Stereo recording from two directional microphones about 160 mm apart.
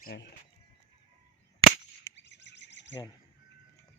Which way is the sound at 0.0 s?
90° left.